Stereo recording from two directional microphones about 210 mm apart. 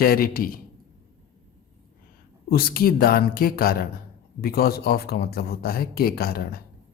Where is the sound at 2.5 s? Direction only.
45° left (ahead or behind).